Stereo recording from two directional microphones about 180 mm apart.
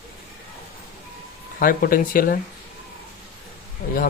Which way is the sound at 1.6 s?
50° left (ahead or behind).